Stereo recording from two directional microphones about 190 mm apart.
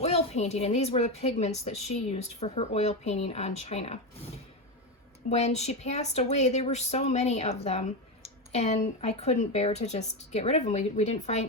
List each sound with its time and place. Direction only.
0.0 s a woman's voice: 35° left (ahead or behind)
5.3 s a woman's voice: 35° left (ahead or behind)